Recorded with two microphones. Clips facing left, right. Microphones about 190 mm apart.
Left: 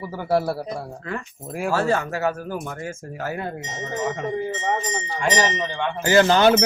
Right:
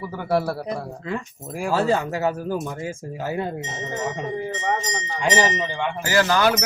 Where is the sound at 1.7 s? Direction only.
15° right (ahead or behind).